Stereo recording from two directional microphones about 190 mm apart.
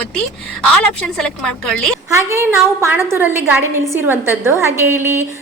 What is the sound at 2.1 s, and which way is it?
A woman's voice, 15° right (ahead or behind).